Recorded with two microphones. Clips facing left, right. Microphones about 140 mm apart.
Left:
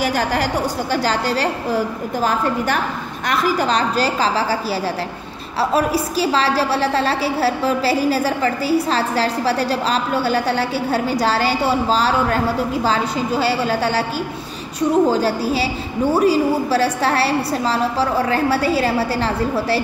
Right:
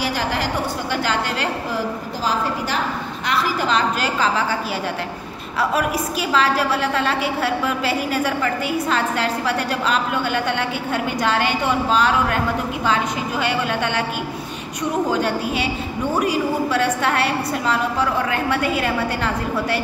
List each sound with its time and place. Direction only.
0.0 s a woman's voice: 45° left (ahead or behind)
3.3 s a woman's voice: 40° left (ahead or behind)
5.6 s a woman's voice: 30° left (ahead or behind)